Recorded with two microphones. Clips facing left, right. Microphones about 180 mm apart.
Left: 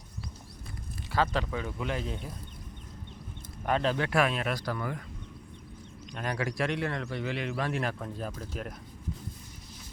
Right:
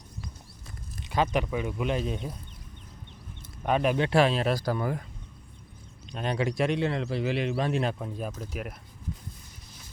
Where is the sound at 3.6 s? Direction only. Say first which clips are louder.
Right 3 dB; 15° right (ahead or behind).